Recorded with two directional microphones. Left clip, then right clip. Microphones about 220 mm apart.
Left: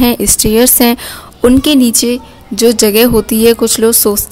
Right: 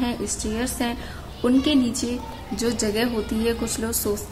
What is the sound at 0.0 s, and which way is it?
A woman's voice, 50° left (ahead or behind).